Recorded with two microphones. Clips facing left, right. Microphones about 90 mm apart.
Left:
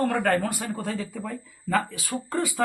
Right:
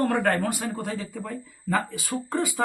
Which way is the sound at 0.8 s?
15° right (ahead or behind).